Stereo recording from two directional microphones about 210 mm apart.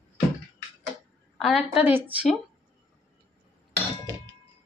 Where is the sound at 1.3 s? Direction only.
5° right (ahead or behind).